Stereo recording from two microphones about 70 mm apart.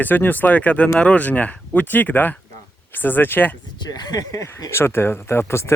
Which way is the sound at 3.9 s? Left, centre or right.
Left.